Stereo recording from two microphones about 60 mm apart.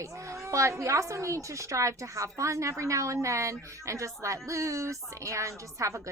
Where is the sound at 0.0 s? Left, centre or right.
Right.